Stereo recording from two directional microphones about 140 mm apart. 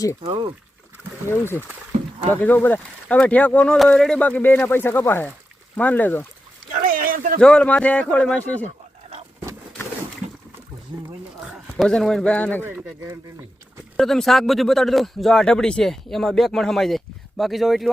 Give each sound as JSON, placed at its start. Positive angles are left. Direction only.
{"t": 0.2, "sound": "speech", "side_deg": -35}
{"t": 1.3, "sound": "speech", "side_deg": 15}
{"t": 6.8, "sound": "a sound", "side_deg": -90}
{"t": 7.3, "sound": "speech", "side_deg": 5}
{"t": 11.4, "sound": "a man's voice", "side_deg": 0}
{"t": 13.9, "sound": "speech", "side_deg": 0}